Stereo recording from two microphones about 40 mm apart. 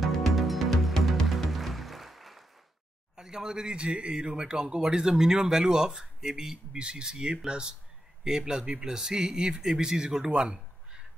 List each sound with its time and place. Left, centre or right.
0.2 s music: centre
3.2 s a man's voice: centre